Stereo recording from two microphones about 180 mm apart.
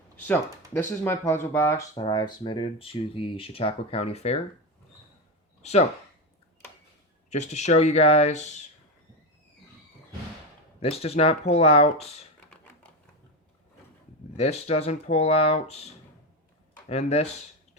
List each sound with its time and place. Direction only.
0.3 s speech: 15° left (ahead or behind); by 4.4 s 35° left (ahead or behind)
7.3 s speech: 40° left (ahead or behind)
10.8 s speech: 35° left (ahead or behind)
14.3 s speech: 35° left (ahead or behind)
16.9 s speech: 35° left (ahead or behind)